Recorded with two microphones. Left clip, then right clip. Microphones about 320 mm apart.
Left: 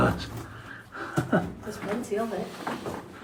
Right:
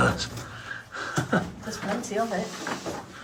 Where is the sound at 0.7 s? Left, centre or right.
Centre.